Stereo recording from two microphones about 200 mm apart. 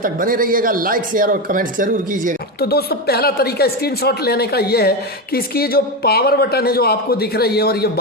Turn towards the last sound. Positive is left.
turn(degrees=50)  # may be behind; listen again after turning